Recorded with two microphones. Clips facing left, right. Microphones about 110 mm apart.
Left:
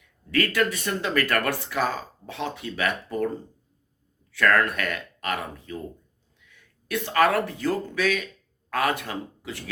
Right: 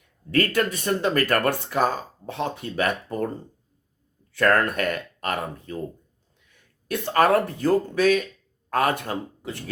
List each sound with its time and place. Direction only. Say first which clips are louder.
0.3 s speech: right 1 dB; 40° right (ahead or behind)
4.3 s speech: right 1 dB; 35° right (ahead or behind)